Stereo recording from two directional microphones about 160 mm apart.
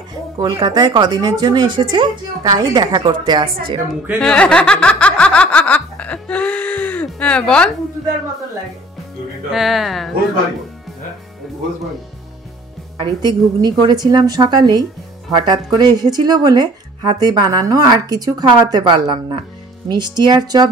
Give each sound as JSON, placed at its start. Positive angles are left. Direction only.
{"t": 0.4, "sound": "speech", "side_deg": -25}
{"t": 4.2, "sound": "snicker", "side_deg": 5}
{"t": 9.5, "sound": "speech", "side_deg": 0}
{"t": 13.0, "sound": "speech", "side_deg": -25}